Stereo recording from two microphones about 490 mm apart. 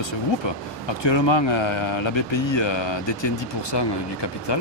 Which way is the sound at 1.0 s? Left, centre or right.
Left.